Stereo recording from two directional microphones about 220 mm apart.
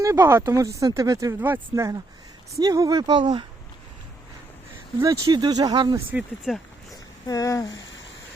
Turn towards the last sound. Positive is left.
turn(degrees=15)  # may be behind; listen again after turning